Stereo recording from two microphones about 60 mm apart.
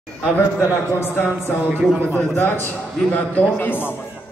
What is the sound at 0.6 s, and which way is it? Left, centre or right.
A man's voice, left.